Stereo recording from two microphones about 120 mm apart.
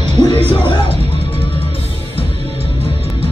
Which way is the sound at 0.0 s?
65° right (ahead or behind).